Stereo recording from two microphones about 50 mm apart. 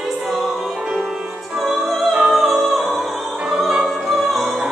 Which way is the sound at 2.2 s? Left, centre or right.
Centre.